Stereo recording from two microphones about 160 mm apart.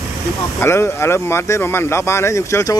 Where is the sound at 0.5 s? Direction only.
15° left (ahead or behind).